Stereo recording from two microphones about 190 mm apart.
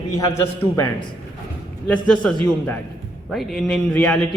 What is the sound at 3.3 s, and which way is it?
Speech, centre (ahead or behind).